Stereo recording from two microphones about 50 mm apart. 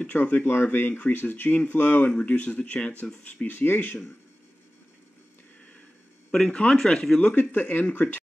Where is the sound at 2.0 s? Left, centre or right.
Left.